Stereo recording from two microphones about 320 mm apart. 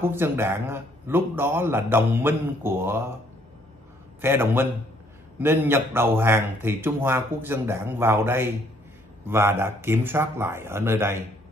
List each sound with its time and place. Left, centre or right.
0.0 s a man's voice: centre
4.2 s a man's voice: centre